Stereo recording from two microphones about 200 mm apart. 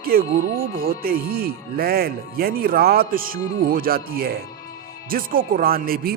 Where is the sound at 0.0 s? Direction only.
50° right (ahead or behind).